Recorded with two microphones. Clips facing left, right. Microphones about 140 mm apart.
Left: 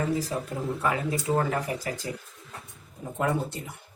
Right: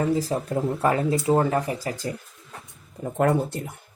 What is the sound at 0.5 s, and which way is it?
Speech, 45° right (ahead or behind).